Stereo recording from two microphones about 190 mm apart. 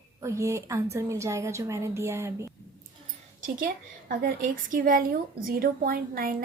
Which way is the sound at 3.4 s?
45° right (ahead or behind).